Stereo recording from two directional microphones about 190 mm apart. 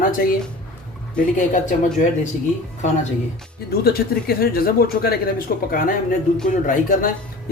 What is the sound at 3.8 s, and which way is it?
Speech, 55° left (ahead or behind).